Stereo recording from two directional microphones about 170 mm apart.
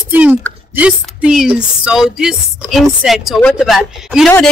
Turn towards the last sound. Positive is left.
turn(degrees=0)  # may be behind; listen again after turning